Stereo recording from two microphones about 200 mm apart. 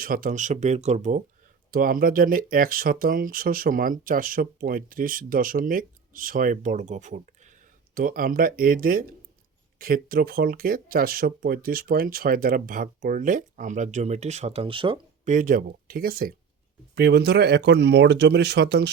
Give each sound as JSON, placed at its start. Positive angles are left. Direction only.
{"t": 0.0, "sound": "speech", "side_deg": -45}
{"t": 15.3, "sound": "speech", "side_deg": -40}